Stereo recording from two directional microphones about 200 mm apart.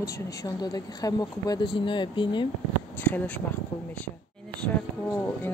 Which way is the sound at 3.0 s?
10° left (ahead or behind).